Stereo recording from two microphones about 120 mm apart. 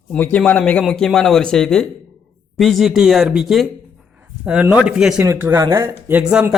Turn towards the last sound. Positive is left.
turn(degrees=-10)  # may be behind; listen again after turning